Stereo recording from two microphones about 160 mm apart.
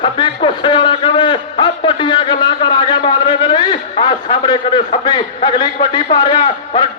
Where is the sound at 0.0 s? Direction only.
30° left (ahead or behind).